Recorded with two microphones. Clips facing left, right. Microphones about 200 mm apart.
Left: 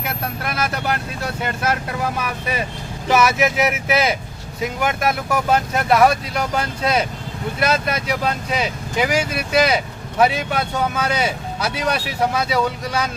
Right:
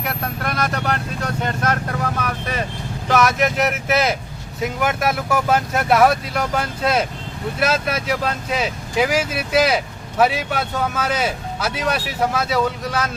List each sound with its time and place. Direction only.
0.0 s speech: 5° left (ahead or behind)